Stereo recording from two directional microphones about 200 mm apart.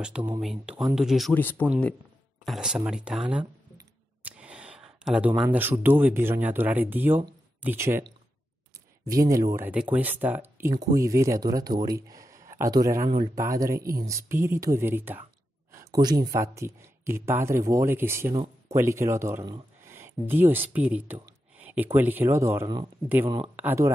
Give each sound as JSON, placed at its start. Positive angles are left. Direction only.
{"t": 0.0, "sound": "speech", "side_deg": -5}
{"t": 2.4, "sound": "speech", "side_deg": 0}
{"t": 3.7, "sound": "a sound", "side_deg": -5}
{"t": 5.4, "sound": "speech", "side_deg": -10}
{"t": 9.0, "sound": "speech", "side_deg": -15}